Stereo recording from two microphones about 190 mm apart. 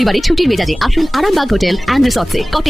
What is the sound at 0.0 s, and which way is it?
A man's voice, centre (ahead or behind).